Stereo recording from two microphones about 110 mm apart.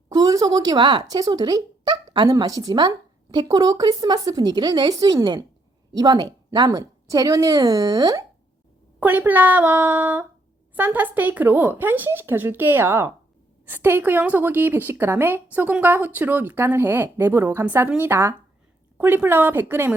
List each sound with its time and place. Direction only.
0.1 s speech: 35° right (ahead or behind)
9.0 s a woman's voice: 15° right (ahead or behind)